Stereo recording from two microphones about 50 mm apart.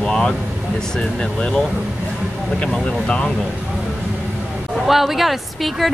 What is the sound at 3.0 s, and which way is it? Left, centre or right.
Speech, left.